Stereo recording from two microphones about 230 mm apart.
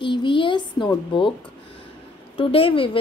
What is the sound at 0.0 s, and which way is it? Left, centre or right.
A child's voice, left.